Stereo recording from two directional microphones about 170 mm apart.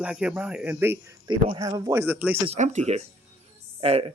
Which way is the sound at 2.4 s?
40° right (ahead or behind).